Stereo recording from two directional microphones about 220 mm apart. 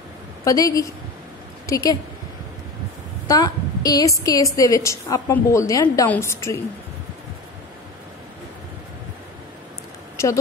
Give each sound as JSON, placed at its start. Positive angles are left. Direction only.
{"t": 0.5, "sound": "a woman's voice", "side_deg": 15}
{"t": 3.3, "sound": "a woman's voice", "side_deg": 15}
{"t": 10.2, "sound": "speech", "side_deg": 15}